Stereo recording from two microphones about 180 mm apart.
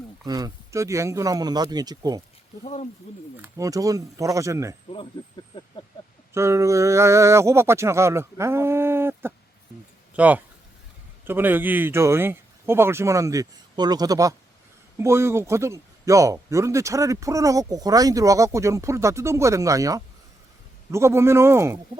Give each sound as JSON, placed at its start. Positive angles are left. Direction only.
{"t": 0.3, "sound": "speech", "side_deg": -20}
{"t": 3.4, "sound": "a man's voice", "side_deg": -20}
{"t": 6.3, "sound": "a man's voice", "side_deg": -15}